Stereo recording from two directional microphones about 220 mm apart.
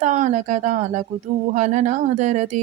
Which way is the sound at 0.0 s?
35° right (ahead or behind).